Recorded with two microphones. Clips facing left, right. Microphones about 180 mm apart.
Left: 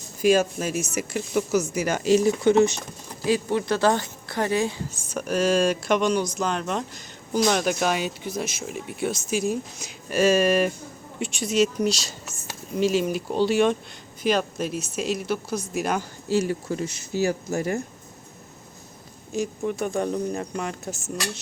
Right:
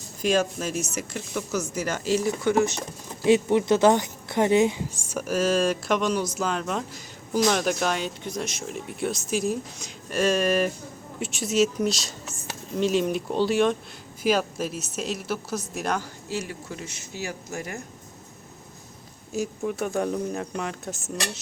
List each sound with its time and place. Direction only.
0.2 s speech: 5° left (ahead or behind); by 2.7 s 25° left (ahead or behind)
3.2 s a woman's voice: 20° right (ahead or behind); by 16.0 s centre (ahead or behind)
16.3 s speech: 35° left (ahead or behind)
19.3 s a woman's voice: 5° right (ahead or behind)